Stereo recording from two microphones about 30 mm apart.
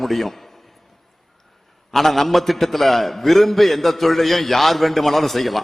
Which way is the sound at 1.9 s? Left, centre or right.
Centre.